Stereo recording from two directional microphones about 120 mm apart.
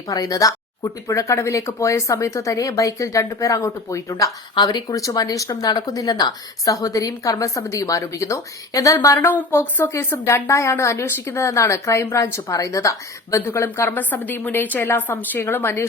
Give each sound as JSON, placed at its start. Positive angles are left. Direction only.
{"t": 0.1, "sound": "speech", "side_deg": 30}